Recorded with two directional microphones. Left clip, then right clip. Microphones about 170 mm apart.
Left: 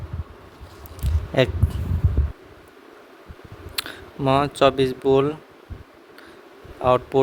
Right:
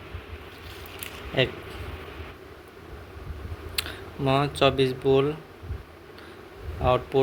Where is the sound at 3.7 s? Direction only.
35° left (ahead or behind).